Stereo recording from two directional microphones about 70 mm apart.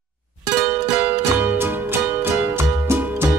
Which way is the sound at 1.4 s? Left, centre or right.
Right.